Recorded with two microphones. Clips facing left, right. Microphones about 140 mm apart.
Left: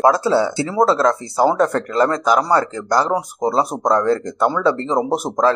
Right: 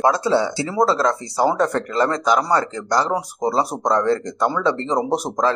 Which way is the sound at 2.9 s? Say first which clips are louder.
Left 2 dB; 5° left (ahead or behind).